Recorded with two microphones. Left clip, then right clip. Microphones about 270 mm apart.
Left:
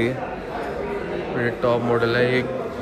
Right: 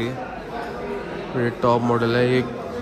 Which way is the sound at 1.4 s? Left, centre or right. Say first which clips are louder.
Right 2 dB; right.